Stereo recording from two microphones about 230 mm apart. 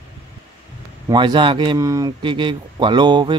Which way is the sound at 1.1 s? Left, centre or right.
Centre.